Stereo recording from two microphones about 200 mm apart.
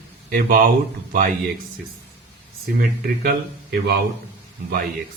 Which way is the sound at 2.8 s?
50° right (ahead or behind).